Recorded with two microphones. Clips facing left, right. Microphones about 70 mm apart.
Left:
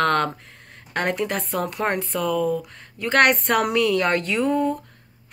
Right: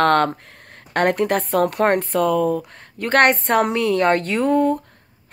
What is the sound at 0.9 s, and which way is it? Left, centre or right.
A woman's voice, right.